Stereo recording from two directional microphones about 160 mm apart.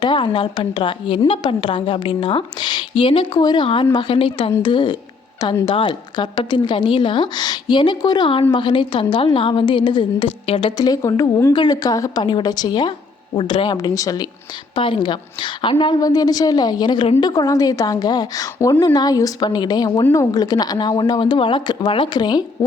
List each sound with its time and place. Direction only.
0.0 s a woman's voice: 30° left (ahead or behind)